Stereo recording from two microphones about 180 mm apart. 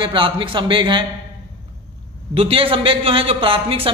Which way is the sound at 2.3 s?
30° right (ahead or behind).